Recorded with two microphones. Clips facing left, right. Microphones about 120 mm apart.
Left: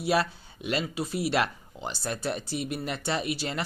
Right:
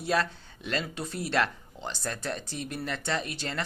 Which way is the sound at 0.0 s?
10° left (ahead or behind).